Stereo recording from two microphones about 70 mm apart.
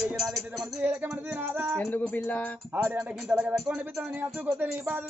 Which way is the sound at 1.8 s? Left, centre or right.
Left.